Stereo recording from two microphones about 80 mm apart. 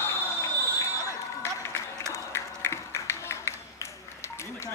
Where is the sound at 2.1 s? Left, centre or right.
Left.